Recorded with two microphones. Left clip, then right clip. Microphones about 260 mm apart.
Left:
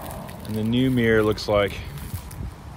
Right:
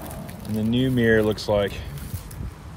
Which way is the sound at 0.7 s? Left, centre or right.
Left.